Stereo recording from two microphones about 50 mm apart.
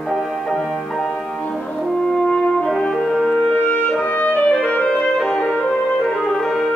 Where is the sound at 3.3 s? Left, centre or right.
Left.